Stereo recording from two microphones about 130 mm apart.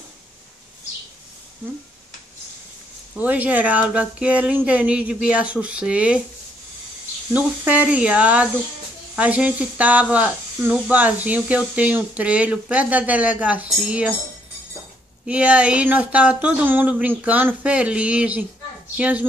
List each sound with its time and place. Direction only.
3.2 s speech: 10° right (ahead or behind)
7.3 s speech: 10° right (ahead or behind)
15.2 s speech: 10° right (ahead or behind)